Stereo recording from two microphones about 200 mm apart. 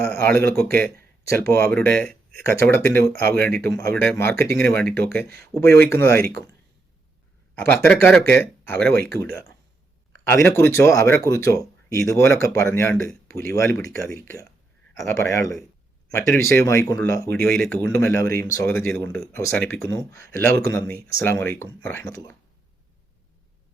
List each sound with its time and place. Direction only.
0.3 s speech: 10° left (ahead or behind)
3.3 s speech: 50° right (ahead or behind)
3.6 s speech: 15° left (ahead or behind)
7.5 s speech: 10° left (ahead or behind)
10.2 s speech: 10° left (ahead or behind)
13.2 s a sound: 50° right (ahead or behind)
13.5 s speech: 10° left (ahead or behind)